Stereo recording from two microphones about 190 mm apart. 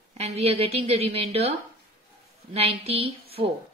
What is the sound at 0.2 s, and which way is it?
Speech, 30° right (ahead or behind).